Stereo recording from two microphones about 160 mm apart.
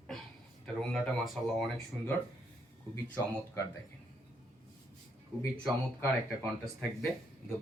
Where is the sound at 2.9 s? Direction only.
15° left (ahead or behind).